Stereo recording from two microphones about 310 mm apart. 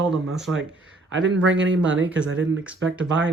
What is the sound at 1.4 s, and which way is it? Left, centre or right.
Speech, right.